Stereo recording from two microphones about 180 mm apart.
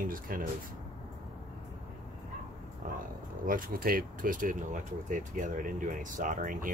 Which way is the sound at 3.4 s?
50° right (ahead or behind).